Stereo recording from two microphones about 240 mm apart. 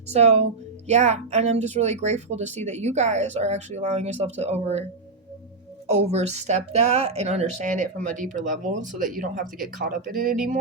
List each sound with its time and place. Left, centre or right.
0.1 s a woman's voice: right
5.9 s a woman's voice: right